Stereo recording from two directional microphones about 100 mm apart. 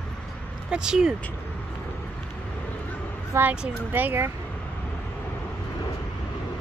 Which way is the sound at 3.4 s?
20° right (ahead or behind).